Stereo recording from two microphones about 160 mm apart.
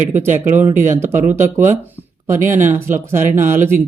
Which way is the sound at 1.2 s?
50° right (ahead or behind).